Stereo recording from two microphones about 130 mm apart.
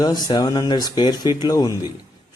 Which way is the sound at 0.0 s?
30° left (ahead or behind).